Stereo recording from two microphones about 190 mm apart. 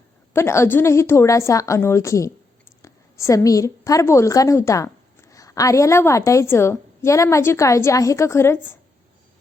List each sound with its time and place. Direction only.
0.3 s a woman's voice: 15° left (ahead or behind)